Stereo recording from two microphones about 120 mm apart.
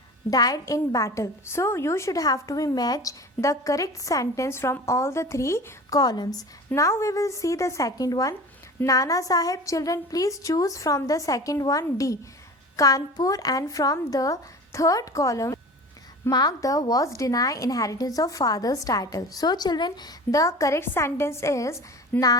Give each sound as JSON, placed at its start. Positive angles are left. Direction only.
{"t": 0.3, "sound": "a woman's voice", "side_deg": 30}
{"t": 6.7, "sound": "a woman's voice", "side_deg": 25}